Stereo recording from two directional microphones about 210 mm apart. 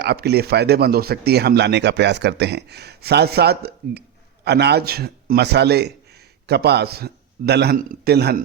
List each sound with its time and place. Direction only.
0.0 s speech: 50° right (ahead or behind)